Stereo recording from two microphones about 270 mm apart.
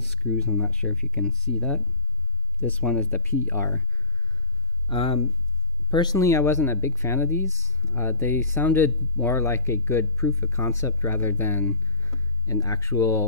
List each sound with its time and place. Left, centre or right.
0.1 s speech: centre
4.8 s speech: left